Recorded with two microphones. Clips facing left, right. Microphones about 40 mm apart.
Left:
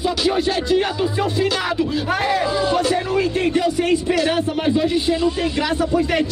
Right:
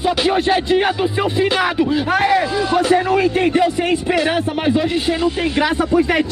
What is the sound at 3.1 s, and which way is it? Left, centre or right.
Speech, right.